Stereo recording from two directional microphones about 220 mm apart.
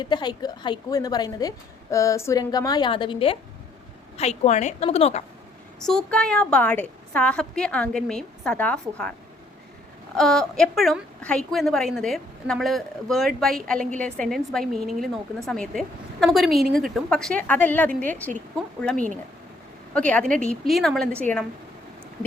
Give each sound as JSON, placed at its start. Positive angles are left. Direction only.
{"t": 0.0, "sound": "a woman's voice", "side_deg": 20}
{"t": 5.8, "sound": "a woman's voice", "side_deg": 5}
{"t": 10.2, "sound": "a woman's voice", "side_deg": 0}
{"t": 18.9, "sound": "speech", "side_deg": -35}
{"t": 19.9, "sound": "a woman's voice", "side_deg": 5}